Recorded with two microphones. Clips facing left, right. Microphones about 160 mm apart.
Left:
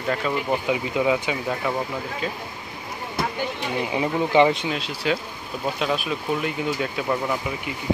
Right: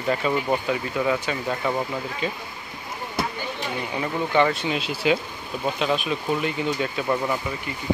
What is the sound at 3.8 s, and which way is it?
Speech, 15° left (ahead or behind).